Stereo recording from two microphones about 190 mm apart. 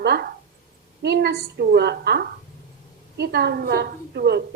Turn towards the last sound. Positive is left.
turn(degrees=-60)  # may be behind; listen again after turning